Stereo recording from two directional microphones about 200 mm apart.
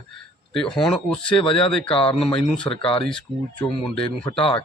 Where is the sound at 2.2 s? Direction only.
5° left (ahead or behind).